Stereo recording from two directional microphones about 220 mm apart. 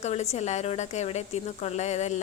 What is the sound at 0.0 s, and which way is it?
A woman's voice, 30° left (ahead or behind).